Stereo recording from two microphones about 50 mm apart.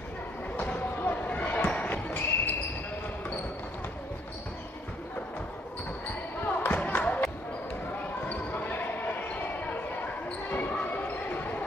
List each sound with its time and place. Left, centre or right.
0.6 s basketball bounce: left
6.4 s basketball bounce: left
8.3 s basketball bounce: left
10.7 s a sound: left